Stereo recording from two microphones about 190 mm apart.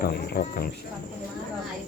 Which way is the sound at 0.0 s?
55° left (ahead or behind).